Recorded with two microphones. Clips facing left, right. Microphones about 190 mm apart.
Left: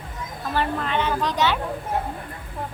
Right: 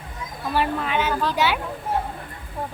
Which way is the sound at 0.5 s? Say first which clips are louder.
Right 1 dB; 10° right (ahead or behind).